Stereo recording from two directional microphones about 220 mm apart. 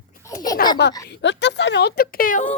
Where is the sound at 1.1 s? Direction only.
50° left (ahead or behind).